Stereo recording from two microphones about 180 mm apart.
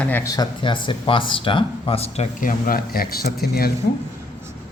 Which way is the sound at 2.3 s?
50° left (ahead or behind).